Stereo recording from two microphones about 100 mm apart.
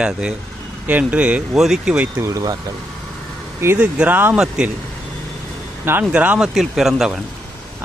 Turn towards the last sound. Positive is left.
turn(degrees=-5)  # may be behind; listen again after turning